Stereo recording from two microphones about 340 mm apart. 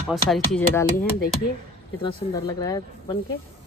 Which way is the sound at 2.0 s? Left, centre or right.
Centre.